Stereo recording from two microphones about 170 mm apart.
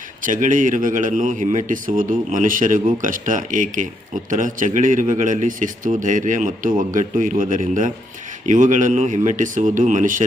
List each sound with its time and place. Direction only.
0.2 s a man's voice: 50° right (ahead or behind)